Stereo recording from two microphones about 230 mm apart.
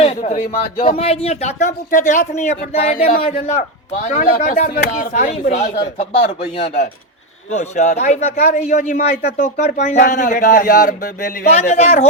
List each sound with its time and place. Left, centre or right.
0.0 s speech: left